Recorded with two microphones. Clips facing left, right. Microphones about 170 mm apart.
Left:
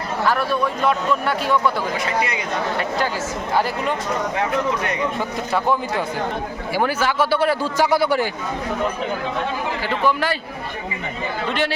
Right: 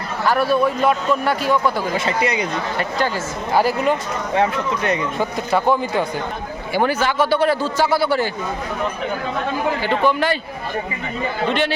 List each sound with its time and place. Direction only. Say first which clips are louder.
0.3 s a man's voice: right 5 dB; 5° right (ahead or behind)
2.0 s speech: right 3 dB; 25° right (ahead or behind)
3.5 s a man's voice: right 5 dB; 5° right (ahead or behind)
4.4 s speech: right 5 dB; 30° right (ahead or behind)
6.7 s a man's voice: right 2 dB; 5° left (ahead or behind)
9.8 s a man's voice: right 1 dB; 5° left (ahead or behind)